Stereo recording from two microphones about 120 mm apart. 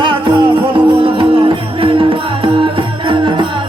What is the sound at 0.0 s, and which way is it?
Music, 40° right (ahead or behind).